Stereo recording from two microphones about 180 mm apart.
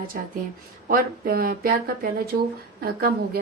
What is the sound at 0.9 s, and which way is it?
A woman's voice, 50° right (ahead or behind).